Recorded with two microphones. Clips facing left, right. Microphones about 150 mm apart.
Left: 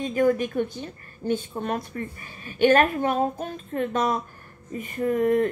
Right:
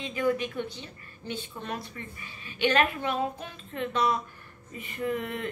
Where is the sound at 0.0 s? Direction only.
45° left (ahead or behind).